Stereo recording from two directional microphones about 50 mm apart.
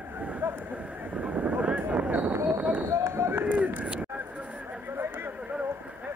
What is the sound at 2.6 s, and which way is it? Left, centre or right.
Run, right.